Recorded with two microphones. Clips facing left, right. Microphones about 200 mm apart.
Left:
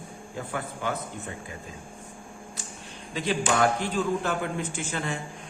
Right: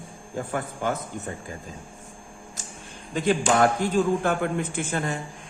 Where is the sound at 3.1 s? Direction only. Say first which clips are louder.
Right 4 dB; 50° right (ahead or behind).